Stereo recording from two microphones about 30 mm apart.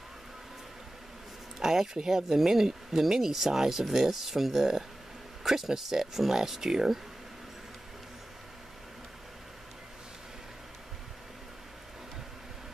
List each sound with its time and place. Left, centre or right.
1.6 s speech: centre